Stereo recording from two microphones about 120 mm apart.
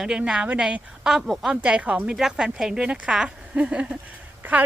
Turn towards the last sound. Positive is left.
turn(degrees=-10)  # may be behind; listen again after turning